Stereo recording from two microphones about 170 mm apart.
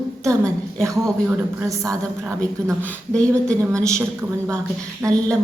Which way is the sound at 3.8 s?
20° right (ahead or behind).